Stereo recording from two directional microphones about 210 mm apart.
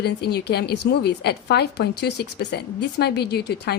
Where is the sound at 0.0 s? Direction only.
50° left (ahead or behind).